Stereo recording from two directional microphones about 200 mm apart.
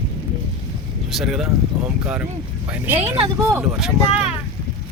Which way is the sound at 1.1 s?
Centre (ahead or behind).